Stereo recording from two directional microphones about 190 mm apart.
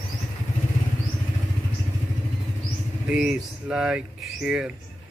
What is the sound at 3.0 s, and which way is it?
Speech, 5° right (ahead or behind).